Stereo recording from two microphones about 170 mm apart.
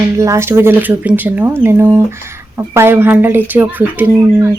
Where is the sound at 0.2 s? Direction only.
15° right (ahead or behind).